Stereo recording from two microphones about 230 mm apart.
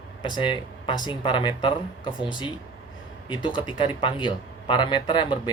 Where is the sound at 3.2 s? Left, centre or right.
Left.